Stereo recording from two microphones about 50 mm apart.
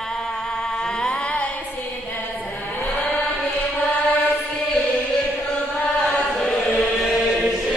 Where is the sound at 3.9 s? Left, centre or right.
Left.